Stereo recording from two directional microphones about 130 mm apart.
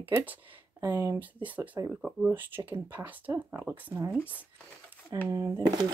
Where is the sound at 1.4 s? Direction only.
10° right (ahead or behind).